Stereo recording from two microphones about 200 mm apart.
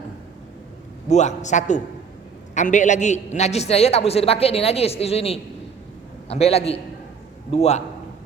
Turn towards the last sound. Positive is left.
turn(degrees=35)  # may be behind; listen again after turning